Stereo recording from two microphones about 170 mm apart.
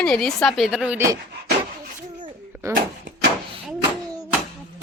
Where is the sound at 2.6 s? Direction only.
15° right (ahead or behind).